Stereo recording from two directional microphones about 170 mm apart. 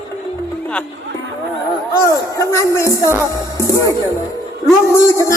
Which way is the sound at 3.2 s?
20° left (ahead or behind).